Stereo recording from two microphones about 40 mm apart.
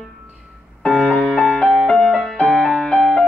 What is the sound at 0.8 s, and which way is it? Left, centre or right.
Music, centre.